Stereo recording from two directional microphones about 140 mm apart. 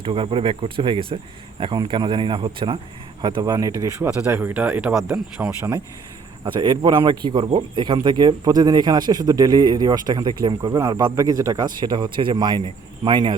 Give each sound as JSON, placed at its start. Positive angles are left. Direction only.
{"t": 0.0, "sound": "speech", "side_deg": -40}
{"t": 4.2, "sound": "speech", "side_deg": -10}
{"t": 6.4, "sound": "speech", "side_deg": -35}